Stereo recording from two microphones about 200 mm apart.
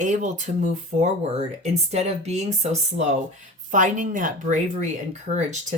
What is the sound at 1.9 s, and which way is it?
Speech, 30° right (ahead or behind).